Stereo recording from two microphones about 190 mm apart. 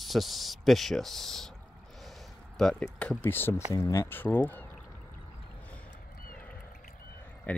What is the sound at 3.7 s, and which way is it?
Speech, 15° left (ahead or behind).